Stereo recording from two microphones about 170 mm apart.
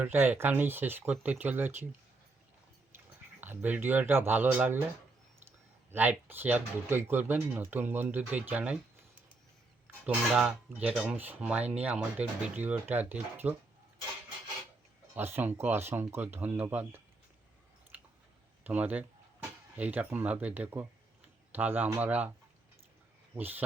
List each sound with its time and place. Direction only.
0.0 s speech: 10° right (ahead or behind)
3.4 s speech: 10° right (ahead or behind)
9.8 s speech: 5° right (ahead or behind)
15.1 s speech: 10° right (ahead or behind)
17.9 s chewing: 10° right (ahead or behind)
18.6 s speech: 10° right (ahead or behind)
23.3 s speech: 10° right (ahead or behind)